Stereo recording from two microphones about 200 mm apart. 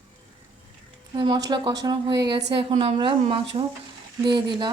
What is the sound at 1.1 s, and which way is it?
Speech, 25° right (ahead or behind).